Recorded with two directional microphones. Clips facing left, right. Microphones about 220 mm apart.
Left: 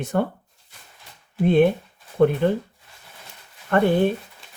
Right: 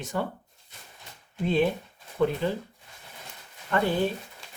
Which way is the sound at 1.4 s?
55° left (ahead or behind).